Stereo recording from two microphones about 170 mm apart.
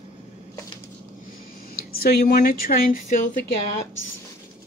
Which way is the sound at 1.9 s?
60° left (ahead or behind).